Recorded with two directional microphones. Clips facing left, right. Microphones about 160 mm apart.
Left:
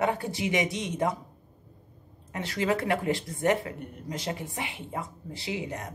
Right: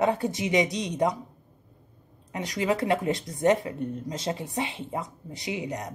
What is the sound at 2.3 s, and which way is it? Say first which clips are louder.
Speech: right 1 dB; 15° right (ahead or behind).